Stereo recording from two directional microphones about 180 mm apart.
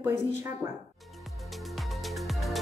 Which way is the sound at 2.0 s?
Centre (ahead or behind).